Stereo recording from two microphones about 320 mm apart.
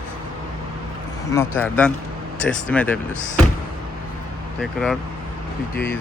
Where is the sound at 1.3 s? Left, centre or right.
Centre.